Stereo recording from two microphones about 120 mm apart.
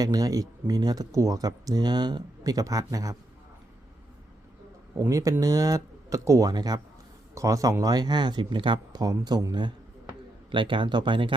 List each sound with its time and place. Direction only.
0.0 s speech: 30° right (ahead or behind)
4.9 s speech: 25° right (ahead or behind); by 11.3 s 45° right (ahead or behind)